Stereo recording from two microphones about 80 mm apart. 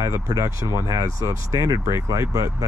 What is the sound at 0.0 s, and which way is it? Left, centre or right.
Speech, right.